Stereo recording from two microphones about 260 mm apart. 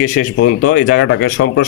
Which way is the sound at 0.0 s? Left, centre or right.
Left.